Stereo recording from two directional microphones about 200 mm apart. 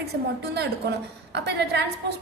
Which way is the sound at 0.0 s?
55° right (ahead or behind).